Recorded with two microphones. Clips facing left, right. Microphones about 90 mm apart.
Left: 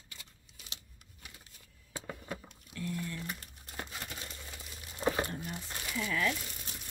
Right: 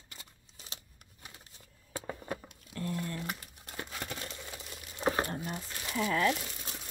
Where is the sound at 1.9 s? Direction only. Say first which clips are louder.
Right 3 dB; 35° right (ahead or behind).